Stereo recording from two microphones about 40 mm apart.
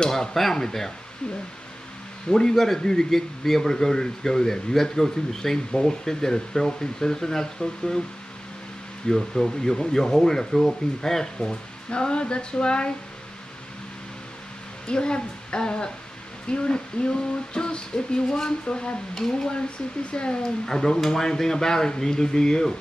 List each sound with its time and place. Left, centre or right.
0.1 s speech: centre
2.2 s speech: centre
9.0 s speech: centre
11.9 s a sound: left
14.9 s a sound: left
20.1 s speech: left